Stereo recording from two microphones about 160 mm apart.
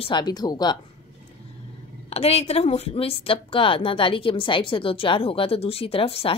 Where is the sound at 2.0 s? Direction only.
40° left (ahead or behind).